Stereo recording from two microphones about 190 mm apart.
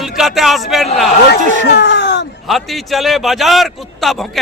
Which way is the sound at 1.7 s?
65° left (ahead or behind).